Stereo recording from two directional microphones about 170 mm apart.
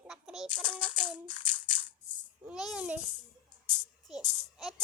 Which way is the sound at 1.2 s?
30° left (ahead or behind).